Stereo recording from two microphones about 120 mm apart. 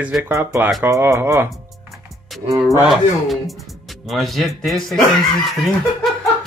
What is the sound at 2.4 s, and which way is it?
Speech, 55° right (ahead or behind).